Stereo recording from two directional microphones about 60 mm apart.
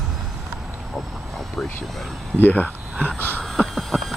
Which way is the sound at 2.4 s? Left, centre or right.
Left.